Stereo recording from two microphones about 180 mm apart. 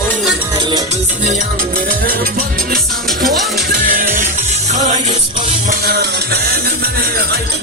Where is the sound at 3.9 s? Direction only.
50° right (ahead or behind).